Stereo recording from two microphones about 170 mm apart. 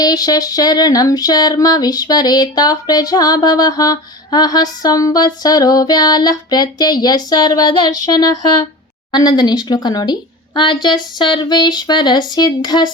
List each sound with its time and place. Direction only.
0.0 s female singing: 25° left (ahead or behind)